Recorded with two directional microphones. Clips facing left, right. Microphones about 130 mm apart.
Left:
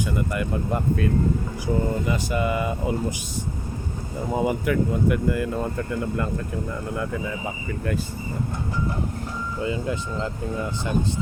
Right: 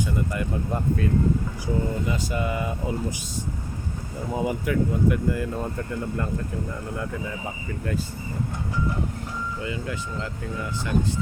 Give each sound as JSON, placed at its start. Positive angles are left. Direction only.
{"t": 0.0, "sound": "speech", "side_deg": 75}
{"t": 1.6, "sound": "speech", "side_deg": 65}
{"t": 4.4, "sound": "speech", "side_deg": 65}
{"t": 9.6, "sound": "speech", "side_deg": 25}